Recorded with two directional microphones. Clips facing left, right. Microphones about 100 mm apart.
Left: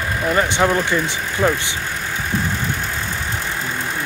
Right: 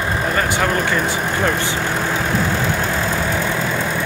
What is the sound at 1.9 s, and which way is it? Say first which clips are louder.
Vehicle: right 6 dB; 90° right.